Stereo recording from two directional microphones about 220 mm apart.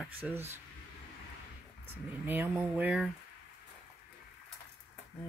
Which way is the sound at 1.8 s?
10° right (ahead or behind).